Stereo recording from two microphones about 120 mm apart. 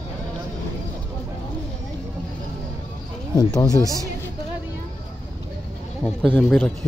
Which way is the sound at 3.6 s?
30° left (ahead or behind).